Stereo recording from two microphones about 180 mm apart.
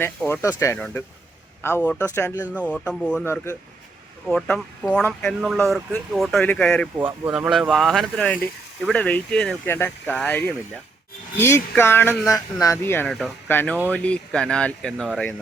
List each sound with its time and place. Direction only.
0.3 s speech: 15° left (ahead or behind)
2.3 s speech: 10° right (ahead or behind)
2.6 s speech: 5° left (ahead or behind)
4.3 s speech: centre (ahead or behind)
7.3 s speech: 5° right (ahead or behind); by 13.1 s 15° left (ahead or behind)
13.1 s speech: centre (ahead or behind)
13.5 s speech: 10° left (ahead or behind)